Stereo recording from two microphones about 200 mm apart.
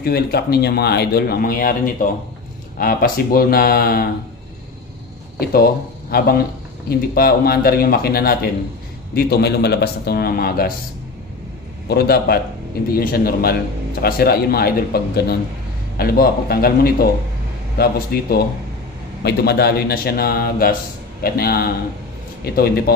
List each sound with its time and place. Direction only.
0.0 s speech: 50° left (ahead or behind)
5.4 s speech: 50° left (ahead or behind)
11.9 s speech: 50° left (ahead or behind)